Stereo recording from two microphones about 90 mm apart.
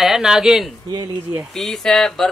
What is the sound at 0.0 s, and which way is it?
Speech, 5° right (ahead or behind).